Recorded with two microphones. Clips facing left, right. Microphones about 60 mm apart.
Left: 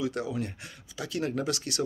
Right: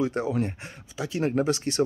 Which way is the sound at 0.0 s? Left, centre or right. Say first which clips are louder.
Right 5 dB; right.